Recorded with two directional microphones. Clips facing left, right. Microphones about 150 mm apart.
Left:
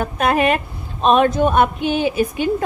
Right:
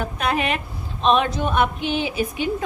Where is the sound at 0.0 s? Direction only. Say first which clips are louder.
Left 6 dB; 50° left (ahead or behind).